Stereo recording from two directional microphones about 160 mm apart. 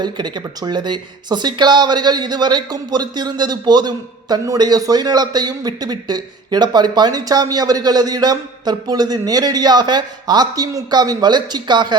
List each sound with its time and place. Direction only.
0.0 s speech: 25° right (ahead or behind)